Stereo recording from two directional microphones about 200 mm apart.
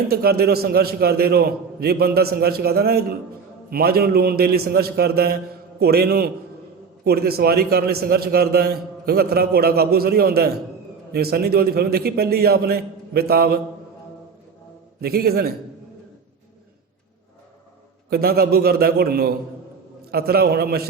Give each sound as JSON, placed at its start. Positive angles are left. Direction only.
{"t": 0.1, "sound": "a man's voice", "side_deg": -50}
{"t": 15.0, "sound": "a man's voice", "side_deg": -50}
{"t": 18.1, "sound": "a man's voice", "side_deg": -50}